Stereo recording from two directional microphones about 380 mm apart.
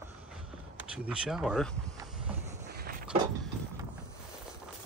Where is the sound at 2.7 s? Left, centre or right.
Right.